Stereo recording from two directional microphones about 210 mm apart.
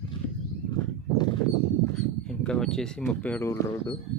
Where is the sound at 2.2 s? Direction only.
5° left (ahead or behind).